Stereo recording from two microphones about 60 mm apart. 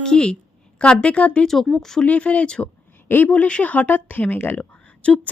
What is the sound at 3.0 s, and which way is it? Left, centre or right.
Speech, left.